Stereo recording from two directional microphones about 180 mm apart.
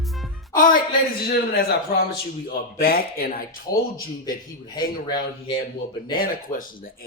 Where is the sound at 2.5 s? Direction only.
55° left (ahead or behind).